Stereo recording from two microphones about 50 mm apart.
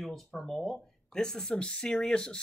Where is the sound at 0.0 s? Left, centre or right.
Centre.